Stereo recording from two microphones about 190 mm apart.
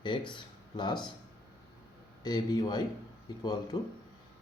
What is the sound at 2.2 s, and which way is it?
Speech, 20° left (ahead or behind).